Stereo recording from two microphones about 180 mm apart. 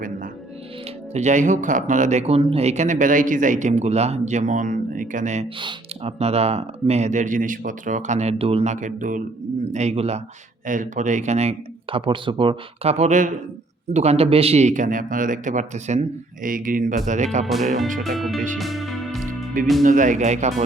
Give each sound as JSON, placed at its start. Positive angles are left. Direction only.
{"t": 1.1, "sound": "speech", "side_deg": -40}
{"t": 5.5, "sound": "speech", "side_deg": -30}
{"t": 18.0, "sound": "music", "side_deg": 0}
{"t": 19.8, "sound": "speech", "side_deg": -45}